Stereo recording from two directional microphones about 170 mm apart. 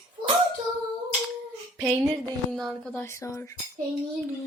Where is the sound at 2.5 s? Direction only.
Centre (ahead or behind).